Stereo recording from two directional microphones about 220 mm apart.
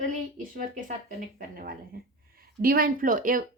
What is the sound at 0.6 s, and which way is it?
A woman's voice, 35° right (ahead or behind).